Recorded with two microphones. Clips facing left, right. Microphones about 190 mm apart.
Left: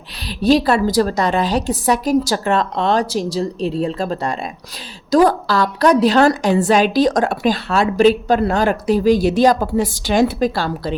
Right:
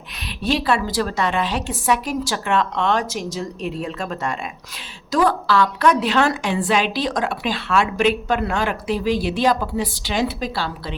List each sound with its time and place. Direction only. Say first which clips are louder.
0.2 s a woman's voice: left 8 dB; 35° left (ahead or behind)